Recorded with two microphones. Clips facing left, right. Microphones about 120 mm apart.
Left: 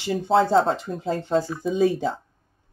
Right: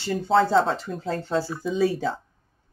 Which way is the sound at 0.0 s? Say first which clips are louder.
Left 1 dB; 15° left (ahead or behind).